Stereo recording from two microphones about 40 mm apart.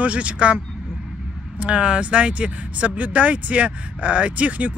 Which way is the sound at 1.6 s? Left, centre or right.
Right.